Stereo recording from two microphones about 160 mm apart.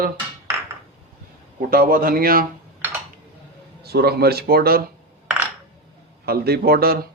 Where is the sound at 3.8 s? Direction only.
80° right.